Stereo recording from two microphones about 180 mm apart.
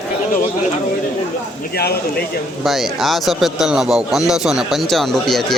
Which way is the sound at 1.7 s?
60° left (ahead or behind).